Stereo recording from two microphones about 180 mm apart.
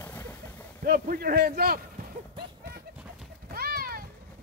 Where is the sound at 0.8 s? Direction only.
55° right (ahead or behind).